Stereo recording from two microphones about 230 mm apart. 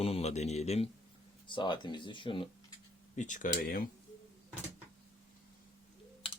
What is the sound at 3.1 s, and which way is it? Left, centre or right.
Speech, left.